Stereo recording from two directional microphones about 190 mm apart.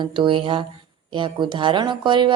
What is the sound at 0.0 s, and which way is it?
A woman's voice, 25° right (ahead or behind).